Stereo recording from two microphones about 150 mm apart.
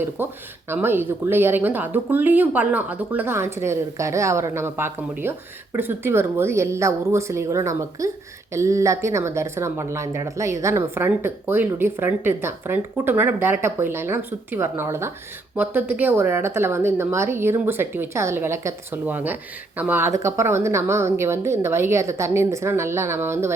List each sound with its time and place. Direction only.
0.2 s a woman's voice: 15° right (ahead or behind)